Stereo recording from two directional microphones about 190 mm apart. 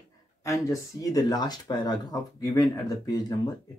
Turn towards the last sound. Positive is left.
turn(degrees=20)  # may be behind; listen again after turning